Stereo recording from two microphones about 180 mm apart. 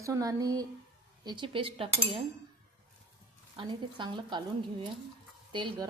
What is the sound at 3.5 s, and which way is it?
Speech, 25° right (ahead or behind).